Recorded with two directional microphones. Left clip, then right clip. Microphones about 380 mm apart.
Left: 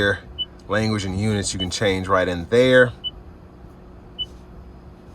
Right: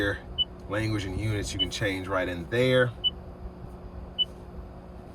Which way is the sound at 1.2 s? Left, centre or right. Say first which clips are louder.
Left 3 dB; centre.